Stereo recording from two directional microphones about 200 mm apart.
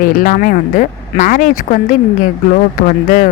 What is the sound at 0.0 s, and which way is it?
Speech, 45° left (ahead or behind).